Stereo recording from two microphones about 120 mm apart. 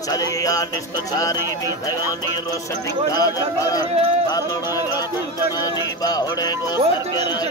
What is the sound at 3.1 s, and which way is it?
Speech, 30° left (ahead or behind).